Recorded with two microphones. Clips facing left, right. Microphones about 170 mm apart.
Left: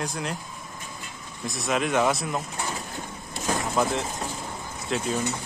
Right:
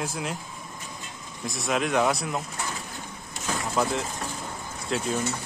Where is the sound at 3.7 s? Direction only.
Centre (ahead or behind).